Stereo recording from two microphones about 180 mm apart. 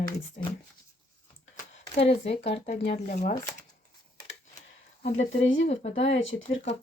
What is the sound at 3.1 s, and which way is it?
Speech, 45° left (ahead or behind).